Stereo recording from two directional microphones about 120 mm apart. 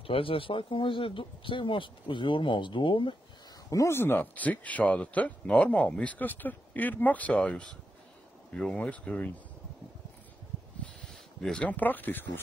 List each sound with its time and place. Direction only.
0.0 s speech: 50° left (ahead or behind)
3.7 s speech: 20° left (ahead or behind)
11.4 s speech: 10° left (ahead or behind)